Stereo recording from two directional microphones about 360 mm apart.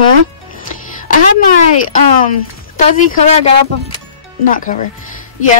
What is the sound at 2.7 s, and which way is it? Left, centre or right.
Speech, left.